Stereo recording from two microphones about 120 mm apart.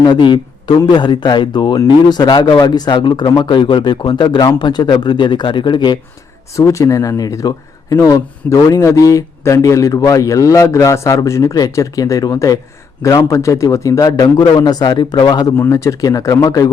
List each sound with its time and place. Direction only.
0.0 s speech: 40° left (ahead or behind)
6.6 s speech: 25° left (ahead or behind)
15.5 s speech: 20° left (ahead or behind)